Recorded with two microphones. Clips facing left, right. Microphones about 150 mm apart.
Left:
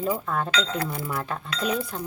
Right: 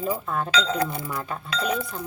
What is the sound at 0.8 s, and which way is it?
Speech, 20° right (ahead or behind).